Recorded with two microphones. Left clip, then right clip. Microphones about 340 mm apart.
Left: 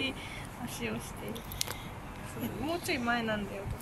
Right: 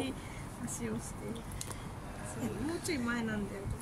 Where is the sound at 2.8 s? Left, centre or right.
Centre.